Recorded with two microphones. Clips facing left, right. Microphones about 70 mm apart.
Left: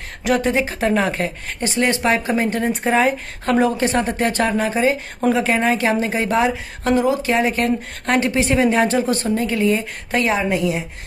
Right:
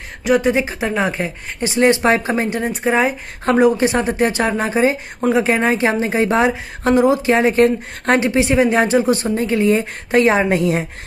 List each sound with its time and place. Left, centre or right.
0.2 s speech: centre
1.8 s a woman's voice: right
2.5 s speech: centre
3.5 s a woman's voice: centre
8.2 s a woman's voice: right
10.5 s a woman's voice: right